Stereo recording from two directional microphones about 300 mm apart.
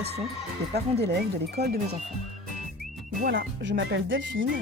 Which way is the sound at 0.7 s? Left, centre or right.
Right.